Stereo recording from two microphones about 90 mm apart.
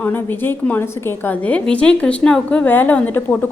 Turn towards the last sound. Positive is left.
turn(degrees=20)  # may be behind; listen again after turning